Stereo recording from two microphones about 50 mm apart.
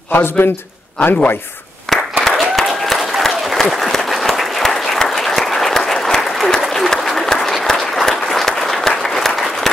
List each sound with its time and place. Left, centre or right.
0.1 s a man's voice: left
1.9 s applause: centre